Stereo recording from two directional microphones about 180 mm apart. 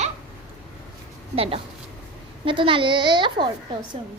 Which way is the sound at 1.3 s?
30° right (ahead or behind).